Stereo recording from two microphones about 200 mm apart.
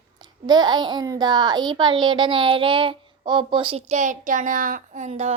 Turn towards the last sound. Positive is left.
turn(degrees=-35)  # may be behind; listen again after turning